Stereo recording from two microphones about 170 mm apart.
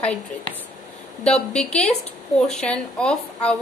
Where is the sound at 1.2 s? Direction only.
5° left (ahead or behind).